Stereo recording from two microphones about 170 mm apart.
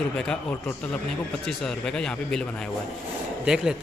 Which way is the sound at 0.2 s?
5° left (ahead or behind).